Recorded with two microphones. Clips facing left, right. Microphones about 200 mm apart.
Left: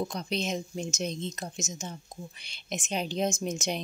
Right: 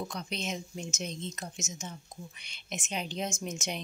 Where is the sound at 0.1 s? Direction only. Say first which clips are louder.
Left 5 dB; 35° left (ahead or behind).